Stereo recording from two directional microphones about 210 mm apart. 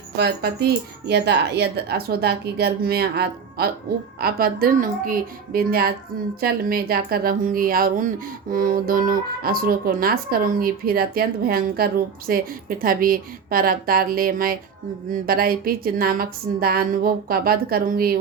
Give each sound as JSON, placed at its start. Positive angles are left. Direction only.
{"t": 0.2, "sound": "speech", "side_deg": -50}